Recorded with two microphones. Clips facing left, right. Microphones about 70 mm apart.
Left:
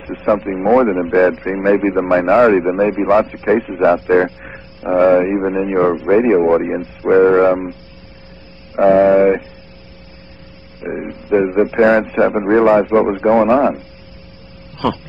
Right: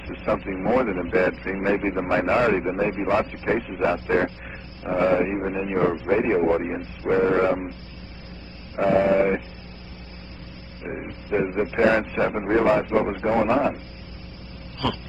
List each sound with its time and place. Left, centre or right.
0.1 s speech: left
8.7 s speech: left
11.3 s speech: left